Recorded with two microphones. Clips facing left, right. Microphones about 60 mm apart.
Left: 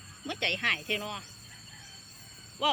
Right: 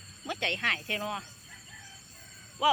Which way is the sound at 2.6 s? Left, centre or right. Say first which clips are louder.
Right 3 dB; centre.